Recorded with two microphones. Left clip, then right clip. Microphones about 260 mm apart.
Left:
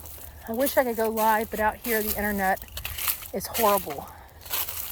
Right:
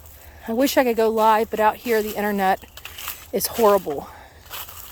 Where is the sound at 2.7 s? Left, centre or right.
Left.